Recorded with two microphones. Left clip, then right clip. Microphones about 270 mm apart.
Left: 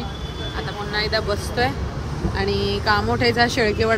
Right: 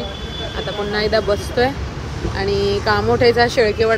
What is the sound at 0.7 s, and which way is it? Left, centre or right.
Speech, centre.